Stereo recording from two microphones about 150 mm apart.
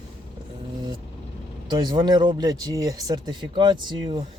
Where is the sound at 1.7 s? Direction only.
30° right (ahead or behind).